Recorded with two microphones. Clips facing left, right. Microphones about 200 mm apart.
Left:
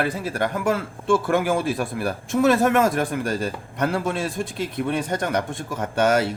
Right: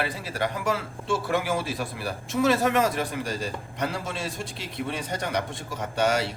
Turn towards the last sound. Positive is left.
turn(degrees=50)  # may be behind; listen again after turning